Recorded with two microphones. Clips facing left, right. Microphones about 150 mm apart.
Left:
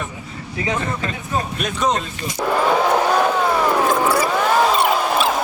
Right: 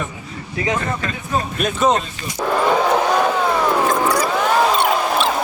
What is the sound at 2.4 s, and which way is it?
Vehicle, 5° left (ahead or behind).